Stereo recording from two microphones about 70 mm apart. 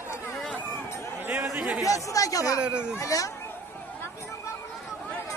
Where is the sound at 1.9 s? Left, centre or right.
Left.